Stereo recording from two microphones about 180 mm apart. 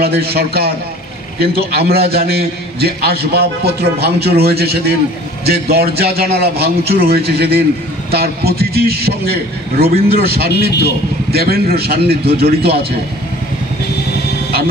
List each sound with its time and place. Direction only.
0.0 s a man's voice: 60° right (ahead or behind)